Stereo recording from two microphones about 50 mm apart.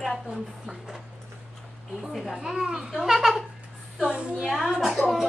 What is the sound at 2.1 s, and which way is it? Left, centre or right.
Speech, centre.